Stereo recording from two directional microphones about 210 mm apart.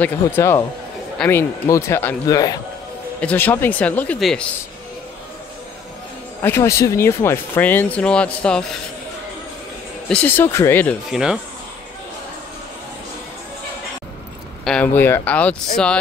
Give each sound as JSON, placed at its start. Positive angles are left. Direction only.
{"t": 0.0, "sound": "speech", "side_deg": 10}
{"t": 6.4, "sound": "speech", "side_deg": 10}
{"t": 10.0, "sound": "speech", "side_deg": 5}
{"t": 14.6, "sound": "speech", "side_deg": 5}